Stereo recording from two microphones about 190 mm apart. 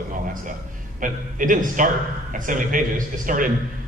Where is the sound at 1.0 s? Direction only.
45° right (ahead or behind).